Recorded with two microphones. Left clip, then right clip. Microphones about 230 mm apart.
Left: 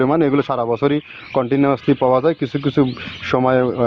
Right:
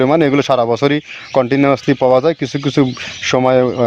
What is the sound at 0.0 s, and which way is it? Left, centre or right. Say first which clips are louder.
Speech: right 4 dB; right.